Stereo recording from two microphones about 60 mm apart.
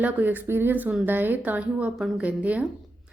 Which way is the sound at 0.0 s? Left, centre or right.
Right.